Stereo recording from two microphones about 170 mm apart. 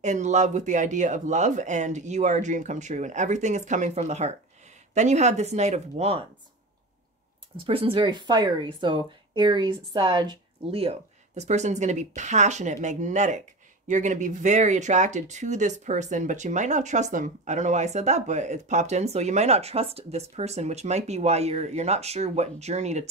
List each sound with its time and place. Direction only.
0.0 s speech: 45° right (ahead or behind)
7.5 s speech: 30° right (ahead or behind)